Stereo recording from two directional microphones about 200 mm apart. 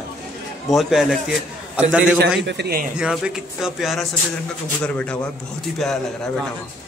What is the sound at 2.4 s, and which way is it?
Speech, 60° right (ahead or behind).